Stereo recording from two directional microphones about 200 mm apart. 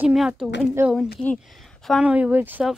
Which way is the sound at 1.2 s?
5° left (ahead or behind).